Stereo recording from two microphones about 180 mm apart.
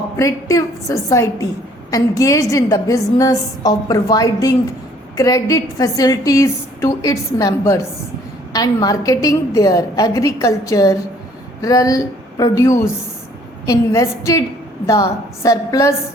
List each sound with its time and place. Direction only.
0.2 s a woman's voice: 20° left (ahead or behind)
15.4 s a woman's voice: 15° left (ahead or behind)